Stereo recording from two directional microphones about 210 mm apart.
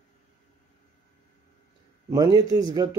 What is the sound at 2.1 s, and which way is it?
Speech, 15° right (ahead or behind).